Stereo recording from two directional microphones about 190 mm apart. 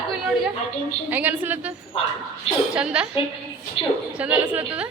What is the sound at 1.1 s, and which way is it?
Speech, 10° right (ahead or behind).